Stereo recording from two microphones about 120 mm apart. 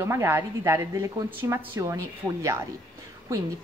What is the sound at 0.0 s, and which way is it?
Speech, 25° right (ahead or behind).